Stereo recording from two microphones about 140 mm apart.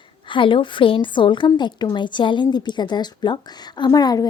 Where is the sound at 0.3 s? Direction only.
35° left (ahead or behind).